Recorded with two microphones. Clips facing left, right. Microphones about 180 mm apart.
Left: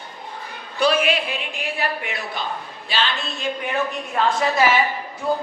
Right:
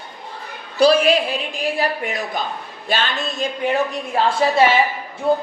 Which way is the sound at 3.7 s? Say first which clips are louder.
Right 4 dB; 30° right (ahead or behind).